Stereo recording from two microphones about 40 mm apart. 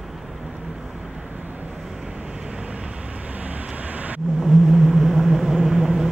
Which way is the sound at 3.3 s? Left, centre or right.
Right.